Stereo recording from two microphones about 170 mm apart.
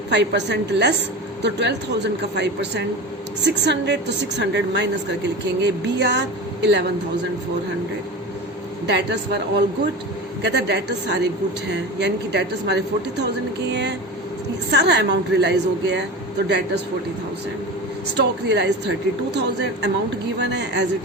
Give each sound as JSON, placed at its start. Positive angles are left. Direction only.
{"t": 0.1, "sound": "a woman's voice", "side_deg": -90}
{"t": 8.9, "sound": "a woman's voice", "side_deg": -85}
{"t": 18.2, "sound": "a woman's voice", "side_deg": -85}